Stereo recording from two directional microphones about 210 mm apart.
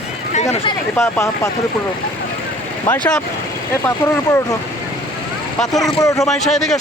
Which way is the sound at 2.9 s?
5° left (ahead or behind).